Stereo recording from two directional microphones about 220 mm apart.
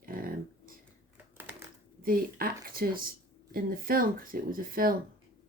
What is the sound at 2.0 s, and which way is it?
Speech, 40° right (ahead or behind).